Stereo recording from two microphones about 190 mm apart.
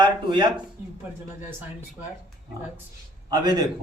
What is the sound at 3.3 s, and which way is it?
Speech, 20° right (ahead or behind).